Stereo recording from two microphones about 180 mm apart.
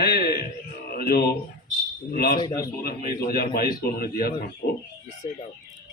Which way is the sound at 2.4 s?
15° left (ahead or behind).